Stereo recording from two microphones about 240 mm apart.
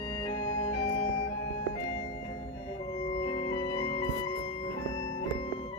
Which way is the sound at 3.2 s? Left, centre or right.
Left.